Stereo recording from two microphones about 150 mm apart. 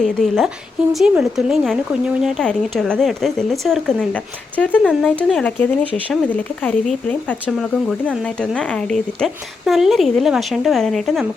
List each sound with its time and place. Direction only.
0.0 s speech: centre (ahead or behind)